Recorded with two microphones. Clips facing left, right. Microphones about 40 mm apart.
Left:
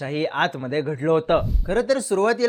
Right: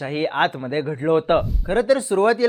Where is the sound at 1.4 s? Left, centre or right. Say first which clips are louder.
Even; centre.